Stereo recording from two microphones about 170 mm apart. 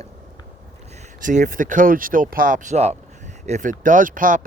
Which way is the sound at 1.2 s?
50° right (ahead or behind).